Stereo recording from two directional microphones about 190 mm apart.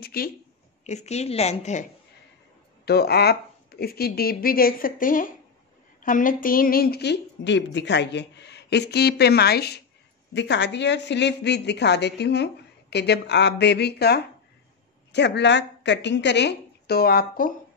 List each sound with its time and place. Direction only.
0.0 s speech: 50° left (ahead or behind)
0.8 s a woman's voice: 35° left (ahead or behind)
2.8 s a woman's voice: 55° left (ahead or behind)
10.3 s a woman's voice: 65° left (ahead or behind); by 17.6 s 50° left (ahead or behind)